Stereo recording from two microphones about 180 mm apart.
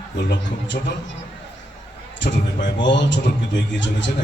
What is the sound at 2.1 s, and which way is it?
A man's voice, 80° left.